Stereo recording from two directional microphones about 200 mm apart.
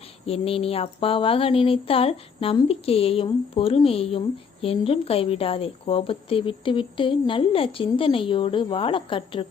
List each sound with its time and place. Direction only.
0.3 s speech: 30° left (ahead or behind)